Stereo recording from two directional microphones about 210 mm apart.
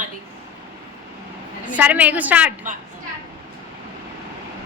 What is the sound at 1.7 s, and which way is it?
Speech, 5° right (ahead or behind).